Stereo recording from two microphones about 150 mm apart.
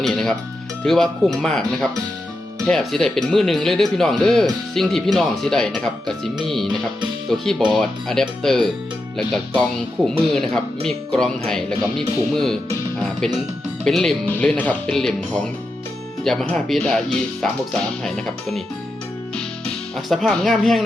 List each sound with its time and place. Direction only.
0.0 s speech: centre (ahead or behind)
10.3 s speech: 5° left (ahead or behind)
13.0 s music: 5° left (ahead or behind)
13.8 s speech: 5° left (ahead or behind)
20.1 s speech: 5° left (ahead or behind)